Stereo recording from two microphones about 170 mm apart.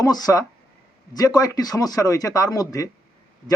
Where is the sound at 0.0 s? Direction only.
20° left (ahead or behind).